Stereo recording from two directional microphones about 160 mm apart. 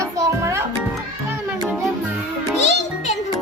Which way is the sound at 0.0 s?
20° right (ahead or behind).